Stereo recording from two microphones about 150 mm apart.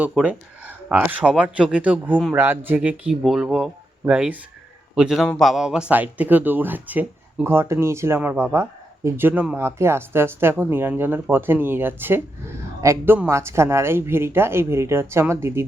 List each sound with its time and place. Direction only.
0.0 s a man's voice: 10° right (ahead or behind)